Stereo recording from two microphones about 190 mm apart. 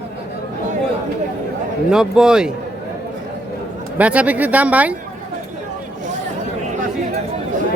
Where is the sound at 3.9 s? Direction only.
5° right (ahead or behind).